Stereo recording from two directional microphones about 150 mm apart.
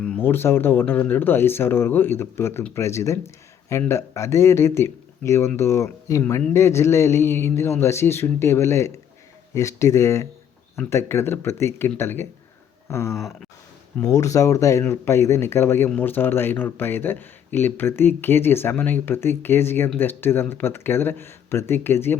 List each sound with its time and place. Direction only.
0.0 s a man's voice: 10° left (ahead or behind)